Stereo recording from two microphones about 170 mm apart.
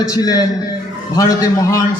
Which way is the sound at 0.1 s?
20° left (ahead or behind).